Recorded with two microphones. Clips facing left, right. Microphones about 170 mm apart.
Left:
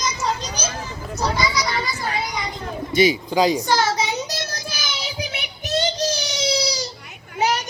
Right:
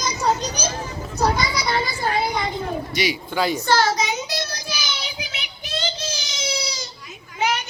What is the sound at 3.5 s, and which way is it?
Speech, 15° left (ahead or behind).